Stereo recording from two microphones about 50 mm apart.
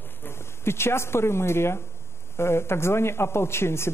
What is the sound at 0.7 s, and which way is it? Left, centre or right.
A man's voice, left.